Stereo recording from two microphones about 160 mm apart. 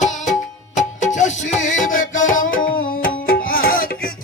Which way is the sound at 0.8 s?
50° left (ahead or behind).